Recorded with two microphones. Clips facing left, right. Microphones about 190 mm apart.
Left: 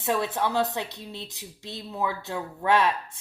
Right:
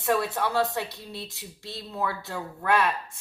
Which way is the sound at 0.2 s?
20° left (ahead or behind).